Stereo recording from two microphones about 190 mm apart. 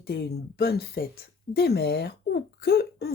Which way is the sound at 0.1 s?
60° left (ahead or behind).